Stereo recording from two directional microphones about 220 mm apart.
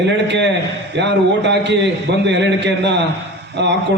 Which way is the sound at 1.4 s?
50° right (ahead or behind).